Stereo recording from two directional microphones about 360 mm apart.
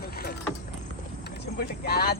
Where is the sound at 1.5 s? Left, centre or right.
Left.